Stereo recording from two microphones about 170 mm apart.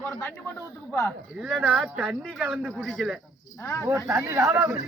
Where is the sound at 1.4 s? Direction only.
5° right (ahead or behind).